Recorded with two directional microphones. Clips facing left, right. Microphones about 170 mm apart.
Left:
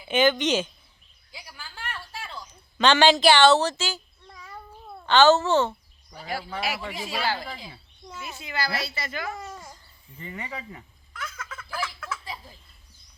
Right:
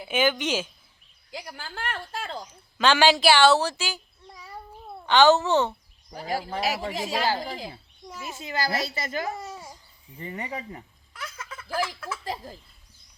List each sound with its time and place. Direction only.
0.1 s speech: 10° right (ahead or behind)
1.3 s a sound: 55° right (ahead or behind)
2.7 s speech: 5° right (ahead or behind)
6.5 s speech: 40° right (ahead or behind)
8.0 s a child's voice: 5° right (ahead or behind)
8.4 s speech: 40° right (ahead or behind)
9.4 s a sound: 10° right (ahead or behind)
10.2 s speech: 35° right (ahead or behind)
11.2 s a sound: 10° right (ahead or behind)